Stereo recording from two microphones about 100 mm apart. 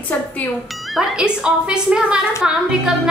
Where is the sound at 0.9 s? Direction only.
10° right (ahead or behind).